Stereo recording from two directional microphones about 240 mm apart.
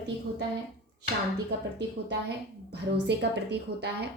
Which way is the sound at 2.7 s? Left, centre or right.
Right.